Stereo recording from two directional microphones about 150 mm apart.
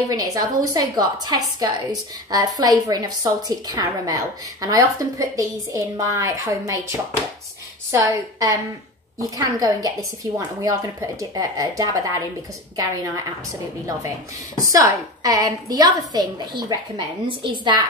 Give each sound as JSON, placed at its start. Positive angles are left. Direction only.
{"t": 0.1, "sound": "a woman's voice", "side_deg": -25}
{"t": 14.6, "sound": "a woman's voice", "side_deg": -20}